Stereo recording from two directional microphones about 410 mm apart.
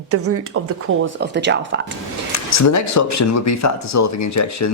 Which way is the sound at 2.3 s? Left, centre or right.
Left.